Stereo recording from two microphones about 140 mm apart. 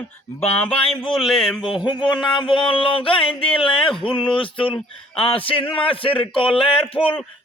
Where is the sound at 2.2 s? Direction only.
35° left (ahead or behind).